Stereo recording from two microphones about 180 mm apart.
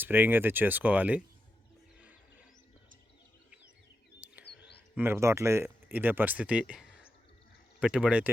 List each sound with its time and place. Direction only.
0.0 s speech: 10° right (ahead or behind)
4.4 s a sound: 65° left (ahead or behind)
4.9 s speech: 15° right (ahead or behind)